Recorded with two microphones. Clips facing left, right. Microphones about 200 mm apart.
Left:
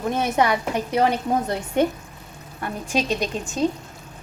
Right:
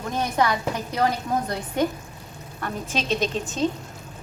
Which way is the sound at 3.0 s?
Centre (ahead or behind).